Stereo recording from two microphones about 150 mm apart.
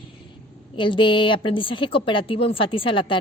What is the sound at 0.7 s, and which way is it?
Speech, 35° left (ahead or behind).